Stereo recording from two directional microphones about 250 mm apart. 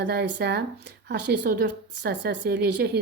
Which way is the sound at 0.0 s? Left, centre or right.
Right.